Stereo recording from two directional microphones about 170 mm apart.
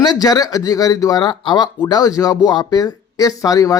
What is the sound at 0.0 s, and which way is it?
Speech, 20° left (ahead or behind).